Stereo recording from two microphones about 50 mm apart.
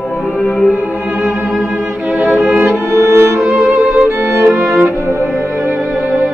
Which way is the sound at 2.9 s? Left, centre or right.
Right.